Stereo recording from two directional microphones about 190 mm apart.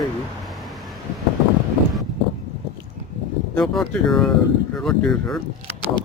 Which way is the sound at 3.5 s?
5° left (ahead or behind).